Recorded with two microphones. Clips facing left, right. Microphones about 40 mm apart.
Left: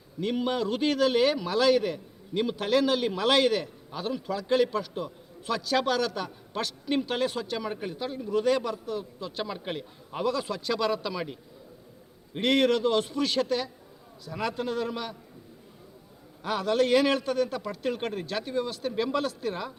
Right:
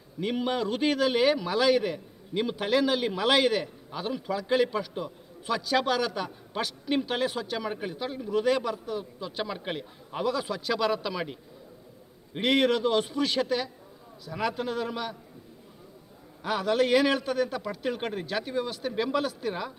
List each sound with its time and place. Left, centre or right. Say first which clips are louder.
0.2 s a man's voice: even; centre
16.4 s a man's voice: even; centre